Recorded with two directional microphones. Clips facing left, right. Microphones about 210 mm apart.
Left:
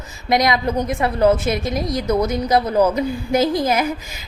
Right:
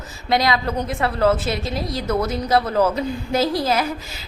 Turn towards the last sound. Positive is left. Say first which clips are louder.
# left 2 dB
turn(degrees=15)  # may be behind; listen again after turning